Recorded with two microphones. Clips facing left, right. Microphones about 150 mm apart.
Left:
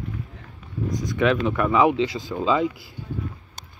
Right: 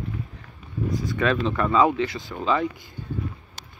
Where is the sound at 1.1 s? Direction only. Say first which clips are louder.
Left 3 dB; 10° left (ahead or behind).